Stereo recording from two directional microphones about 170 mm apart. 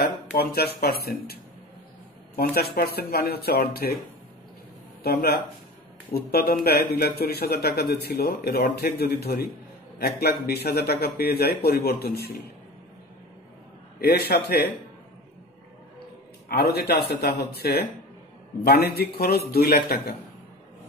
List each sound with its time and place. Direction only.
0.0 s speech: 65° left (ahead or behind)
5.0 s a man's voice: 70° left (ahead or behind)
14.0 s speech: 70° left (ahead or behind)
16.4 s speech: 65° left (ahead or behind)